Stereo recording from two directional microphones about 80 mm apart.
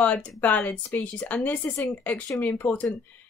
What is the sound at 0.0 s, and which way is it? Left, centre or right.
Speech, centre.